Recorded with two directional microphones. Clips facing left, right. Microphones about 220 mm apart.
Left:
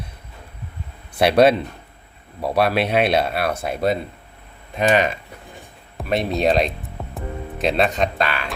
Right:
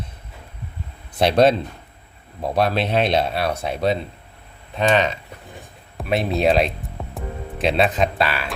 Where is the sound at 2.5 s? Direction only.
5° left (ahead or behind).